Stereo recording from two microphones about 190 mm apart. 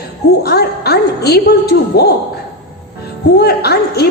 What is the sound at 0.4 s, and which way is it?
Speech, 55° left (ahead or behind).